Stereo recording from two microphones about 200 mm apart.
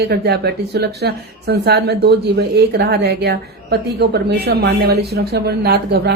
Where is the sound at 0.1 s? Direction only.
55° right (ahead or behind).